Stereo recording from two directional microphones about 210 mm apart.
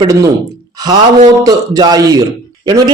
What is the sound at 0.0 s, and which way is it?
A man's voice, 15° right (ahead or behind).